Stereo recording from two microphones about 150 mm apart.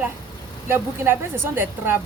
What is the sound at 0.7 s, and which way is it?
Speech, 15° right (ahead or behind).